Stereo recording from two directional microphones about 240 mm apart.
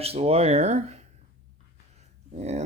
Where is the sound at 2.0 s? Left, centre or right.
Right.